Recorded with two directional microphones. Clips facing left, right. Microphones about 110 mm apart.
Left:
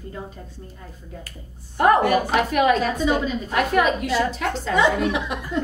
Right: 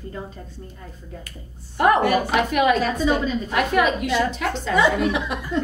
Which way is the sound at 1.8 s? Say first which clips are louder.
Left 1 dB; 40° left (ahead or behind).